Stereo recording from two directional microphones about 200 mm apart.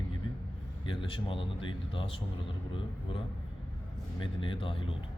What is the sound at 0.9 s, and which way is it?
A man's voice, 25° left (ahead or behind).